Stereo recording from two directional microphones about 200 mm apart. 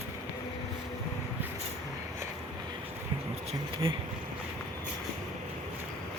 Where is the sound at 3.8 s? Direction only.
25° right (ahead or behind).